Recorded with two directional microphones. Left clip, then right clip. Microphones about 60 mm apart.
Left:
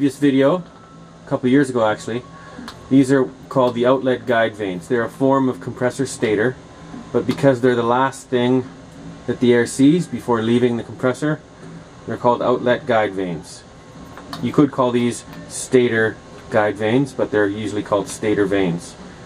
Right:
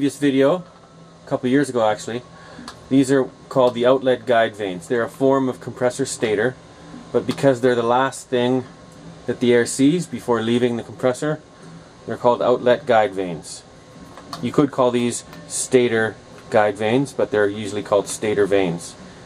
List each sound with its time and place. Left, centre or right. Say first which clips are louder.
0.0 s speech: left 1 dB; centre
12.1 s speech: even; centre
14.5 s speech: left 1 dB; centre